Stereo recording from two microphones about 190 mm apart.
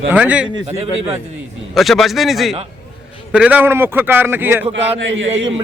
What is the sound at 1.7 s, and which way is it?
A man's voice, centre (ahead or behind).